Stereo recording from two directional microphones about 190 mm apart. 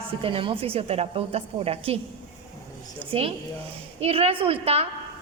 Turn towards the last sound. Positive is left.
turn(degrees=-30)  # may be behind; listen again after turning